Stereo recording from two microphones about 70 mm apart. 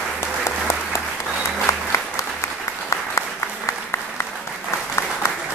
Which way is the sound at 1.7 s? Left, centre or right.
Left.